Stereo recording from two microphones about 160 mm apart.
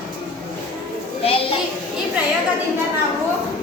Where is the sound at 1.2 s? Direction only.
35° left (ahead or behind).